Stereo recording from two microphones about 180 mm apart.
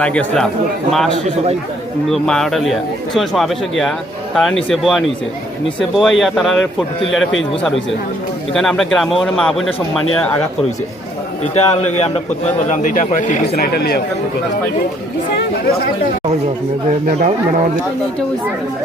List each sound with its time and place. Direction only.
0.0 s a man's voice: 5° left (ahead or behind)
7.2 s speech: 90° left
8.5 s a man's voice: centre (ahead or behind)
11.5 s a man's voice: 35° left (ahead or behind)
13.5 s speech: 60° left (ahead or behind)